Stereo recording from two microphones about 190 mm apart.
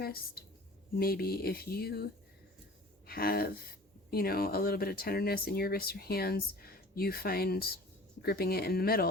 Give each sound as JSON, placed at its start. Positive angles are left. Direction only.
{"t": 0.0, "sound": "speech", "side_deg": 55}
{"t": 3.1, "sound": "speech", "side_deg": 50}